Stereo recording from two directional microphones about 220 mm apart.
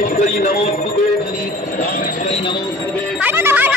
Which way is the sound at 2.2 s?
30° left (ahead or behind).